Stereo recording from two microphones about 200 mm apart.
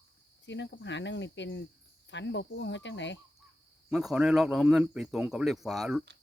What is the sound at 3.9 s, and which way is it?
Speech, centre (ahead or behind).